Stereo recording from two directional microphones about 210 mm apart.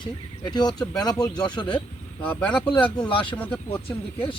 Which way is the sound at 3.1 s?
25° left (ahead or behind).